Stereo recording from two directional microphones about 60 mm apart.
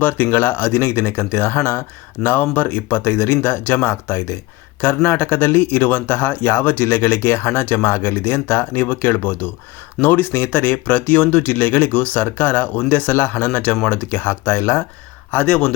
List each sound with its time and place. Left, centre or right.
0.0 s speech: left
2.2 s speech: left
15.3 s speech: left